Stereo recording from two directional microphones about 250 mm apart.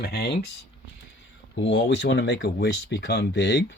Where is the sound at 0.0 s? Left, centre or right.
Left.